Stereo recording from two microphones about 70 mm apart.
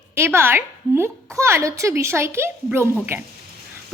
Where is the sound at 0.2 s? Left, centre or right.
Right.